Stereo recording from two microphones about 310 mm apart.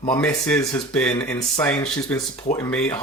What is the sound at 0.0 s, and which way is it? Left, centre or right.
Speech, centre.